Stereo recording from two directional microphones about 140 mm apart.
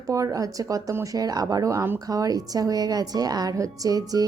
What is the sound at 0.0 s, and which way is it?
Speech, 25° right (ahead or behind).